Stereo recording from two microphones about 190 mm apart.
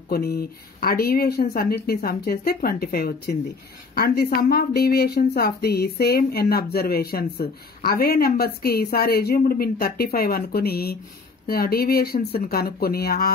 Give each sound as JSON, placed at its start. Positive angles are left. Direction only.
{"t": 0.1, "sound": "a woman's voice", "side_deg": 55}